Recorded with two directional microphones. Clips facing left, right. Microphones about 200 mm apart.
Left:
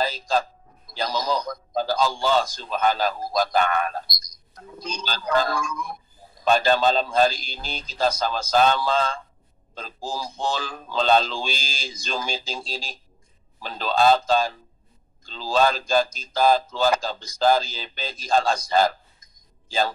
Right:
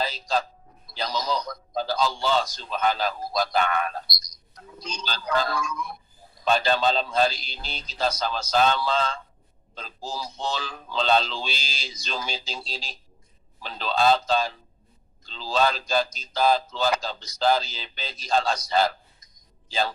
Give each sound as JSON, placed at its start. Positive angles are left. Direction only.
{"t": 0.0, "sound": "a man's voice", "side_deg": 50}